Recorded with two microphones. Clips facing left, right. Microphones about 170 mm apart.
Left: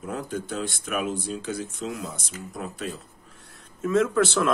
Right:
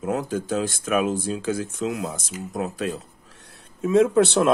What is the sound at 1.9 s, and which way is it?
Speech, 55° right (ahead or behind).